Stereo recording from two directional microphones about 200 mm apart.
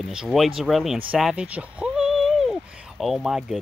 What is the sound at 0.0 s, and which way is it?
Speech, centre (ahead or behind).